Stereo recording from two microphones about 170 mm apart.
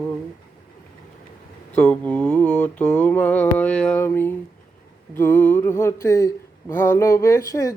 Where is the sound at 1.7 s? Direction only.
10° left (ahead or behind).